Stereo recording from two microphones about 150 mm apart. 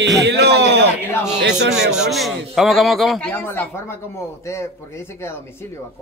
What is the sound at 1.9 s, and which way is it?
Speech, centre (ahead or behind).